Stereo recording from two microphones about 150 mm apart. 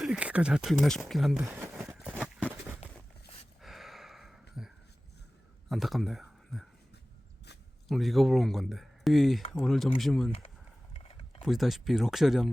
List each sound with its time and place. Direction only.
0.0 s speech: 5° right (ahead or behind)
1.5 s speech: 15° right (ahead or behind)
2.0 s a sound: 5° right (ahead or behind)
5.6 s speech: centre (ahead or behind)
7.9 s speech: centre (ahead or behind)
10.9 s mechanisms: 40° left (ahead or behind)
11.4 s speech: centre (ahead or behind)